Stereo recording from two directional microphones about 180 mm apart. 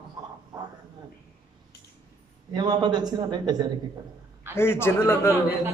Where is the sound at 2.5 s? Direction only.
25° right (ahead or behind).